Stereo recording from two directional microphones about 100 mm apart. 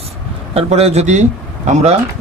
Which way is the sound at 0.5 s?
90° right.